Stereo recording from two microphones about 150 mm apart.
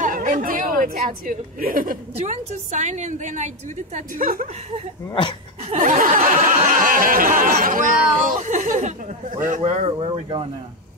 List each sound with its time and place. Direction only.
0.0 s a woman's voice: 60° right (ahead or behind)
2.1 s a woman's voice: 50° right (ahead or behind); by 4.5 s 70° right (ahead or behind)
5.8 s a sound: 65° right (ahead or behind)
9.6 s speech: 35° right (ahead or behind)